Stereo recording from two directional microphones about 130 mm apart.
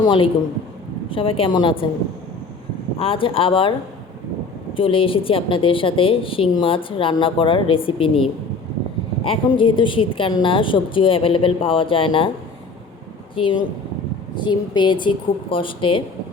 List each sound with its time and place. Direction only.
0.0 s a woman's voice: 40° left (ahead or behind)
3.0 s a woman's voice: 45° left (ahead or behind)
4.8 s a woman's voice: 45° left (ahead or behind)
9.2 s a woman's voice: 45° left (ahead or behind)
13.3 s a woman's voice: 40° left (ahead or behind)